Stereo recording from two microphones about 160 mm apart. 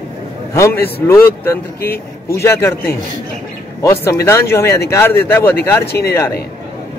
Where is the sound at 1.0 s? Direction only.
15° left (ahead or behind).